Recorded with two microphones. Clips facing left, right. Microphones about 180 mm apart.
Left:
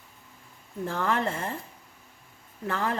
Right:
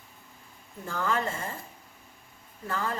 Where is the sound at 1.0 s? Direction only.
60° left (ahead or behind).